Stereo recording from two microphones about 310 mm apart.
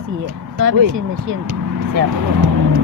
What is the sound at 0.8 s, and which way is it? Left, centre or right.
Speech, right.